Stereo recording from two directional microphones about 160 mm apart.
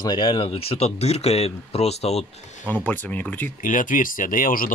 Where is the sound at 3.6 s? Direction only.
55° left (ahead or behind).